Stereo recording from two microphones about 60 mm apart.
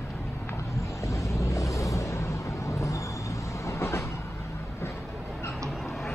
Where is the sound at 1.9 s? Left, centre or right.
Left.